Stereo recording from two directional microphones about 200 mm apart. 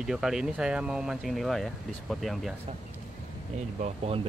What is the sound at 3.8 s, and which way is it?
Speech, 30° right (ahead or behind).